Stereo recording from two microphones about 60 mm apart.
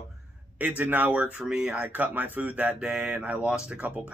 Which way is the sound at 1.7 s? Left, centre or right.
Right.